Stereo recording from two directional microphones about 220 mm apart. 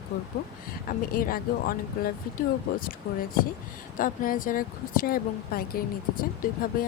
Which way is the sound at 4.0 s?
40° left (ahead or behind).